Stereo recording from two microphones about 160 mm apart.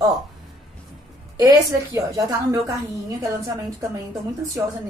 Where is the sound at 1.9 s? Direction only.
20° right (ahead or behind).